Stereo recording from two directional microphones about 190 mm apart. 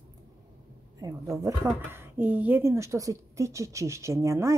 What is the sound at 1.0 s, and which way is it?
Speech, 15° right (ahead or behind).